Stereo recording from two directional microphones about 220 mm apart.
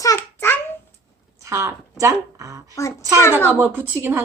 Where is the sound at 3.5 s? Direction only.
10° right (ahead or behind).